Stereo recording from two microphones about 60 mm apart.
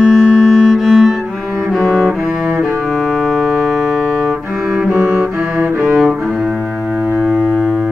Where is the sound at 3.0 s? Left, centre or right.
Centre.